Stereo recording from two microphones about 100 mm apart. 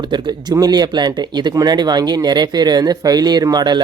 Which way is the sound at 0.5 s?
40° right (ahead or behind).